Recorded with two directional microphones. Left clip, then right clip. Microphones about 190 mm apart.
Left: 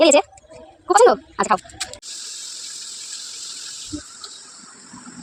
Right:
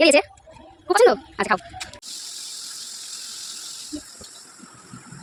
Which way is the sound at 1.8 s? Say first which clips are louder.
Left 5 dB; 45° left (ahead or behind).